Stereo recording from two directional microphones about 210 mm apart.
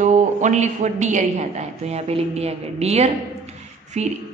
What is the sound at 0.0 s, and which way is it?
A woman's voice, 35° right (ahead or behind).